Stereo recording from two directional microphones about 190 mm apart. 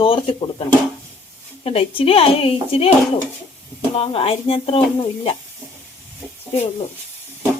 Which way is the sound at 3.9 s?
30° left (ahead or behind).